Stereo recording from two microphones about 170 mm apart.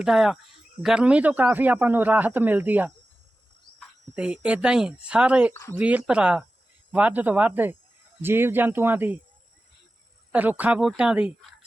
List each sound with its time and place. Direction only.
0.0 s a man's voice: 5° right (ahead or behind)
4.1 s a man's voice: 5° right (ahead or behind)
10.3 s a man's voice: 10° right (ahead or behind)